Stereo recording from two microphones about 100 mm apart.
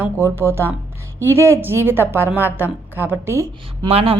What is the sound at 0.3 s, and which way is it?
A woman's voice, 25° right (ahead or behind).